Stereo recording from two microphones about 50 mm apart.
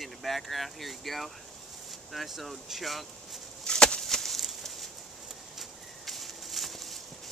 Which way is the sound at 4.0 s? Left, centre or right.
Centre.